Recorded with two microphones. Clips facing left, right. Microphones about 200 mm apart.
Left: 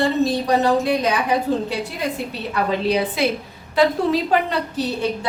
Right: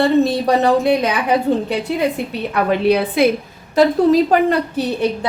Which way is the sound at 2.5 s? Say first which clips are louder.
Right 5 dB; 60° right (ahead or behind).